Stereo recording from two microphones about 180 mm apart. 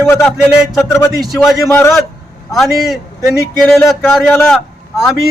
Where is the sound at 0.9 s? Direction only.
15° left (ahead or behind).